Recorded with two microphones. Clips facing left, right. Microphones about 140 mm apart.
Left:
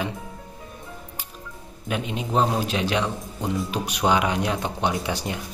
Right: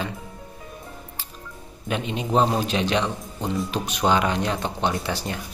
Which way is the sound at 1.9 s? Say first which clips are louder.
Right 2 dB; 5° left (ahead or behind).